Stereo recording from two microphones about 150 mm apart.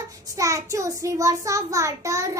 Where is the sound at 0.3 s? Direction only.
20° right (ahead or behind).